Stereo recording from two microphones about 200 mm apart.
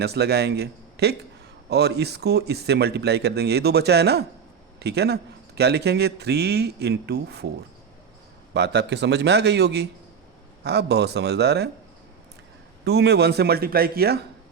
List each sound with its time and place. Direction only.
0.0 s a man's voice: 55° right (ahead or behind)
8.5 s a man's voice: 60° right (ahead or behind)
12.8 s speech: 55° right (ahead or behind)